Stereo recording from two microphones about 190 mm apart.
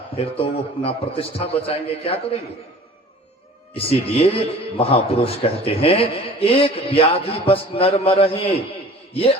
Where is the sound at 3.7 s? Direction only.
30° left (ahead or behind).